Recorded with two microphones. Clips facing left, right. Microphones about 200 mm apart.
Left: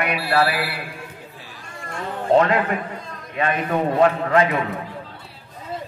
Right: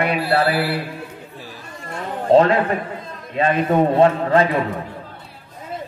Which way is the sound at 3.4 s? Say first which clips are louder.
Right 5 dB; 30° right (ahead or behind).